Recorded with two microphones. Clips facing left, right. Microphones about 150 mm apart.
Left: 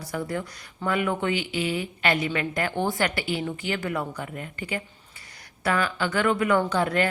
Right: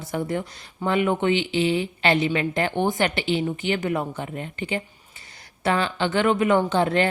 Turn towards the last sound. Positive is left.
turn(degrees=-25)  # may be behind; listen again after turning